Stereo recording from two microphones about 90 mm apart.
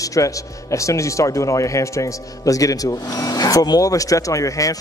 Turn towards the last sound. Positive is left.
turn(degrees=40)  # may be behind; listen again after turning